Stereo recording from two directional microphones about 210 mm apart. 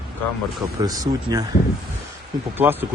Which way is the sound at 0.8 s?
15° right (ahead or behind).